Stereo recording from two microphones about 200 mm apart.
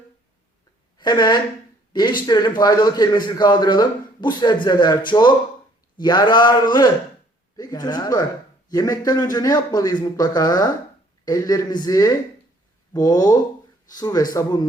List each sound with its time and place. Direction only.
0.9 s a man's voice: 20° left (ahead or behind)
6.0 s a man's voice: 20° left (ahead or behind)